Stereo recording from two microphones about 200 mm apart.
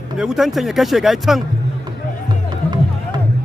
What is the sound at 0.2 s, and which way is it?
Speech, centre (ahead or behind).